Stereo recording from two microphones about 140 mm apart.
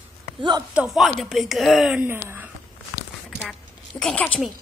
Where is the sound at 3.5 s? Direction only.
5° left (ahead or behind).